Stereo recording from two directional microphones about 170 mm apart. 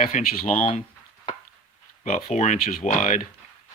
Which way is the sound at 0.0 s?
55° left (ahead or behind).